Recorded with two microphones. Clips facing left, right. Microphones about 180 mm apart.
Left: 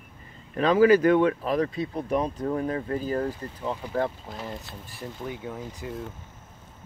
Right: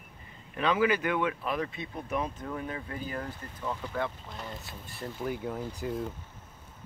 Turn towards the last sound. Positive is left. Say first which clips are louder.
# right 2 dB
turn(degrees=0)  # may be behind; listen again after turning